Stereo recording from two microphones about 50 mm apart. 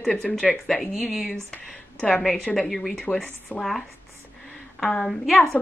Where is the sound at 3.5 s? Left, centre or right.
Left.